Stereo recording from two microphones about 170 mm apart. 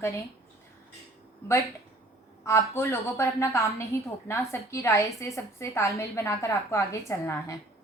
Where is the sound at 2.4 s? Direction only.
15° left (ahead or behind).